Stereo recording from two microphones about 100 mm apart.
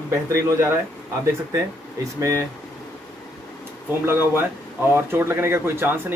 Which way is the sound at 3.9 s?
25° right (ahead or behind).